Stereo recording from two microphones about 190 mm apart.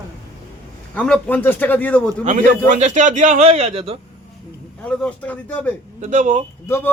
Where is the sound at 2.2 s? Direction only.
45° right (ahead or behind).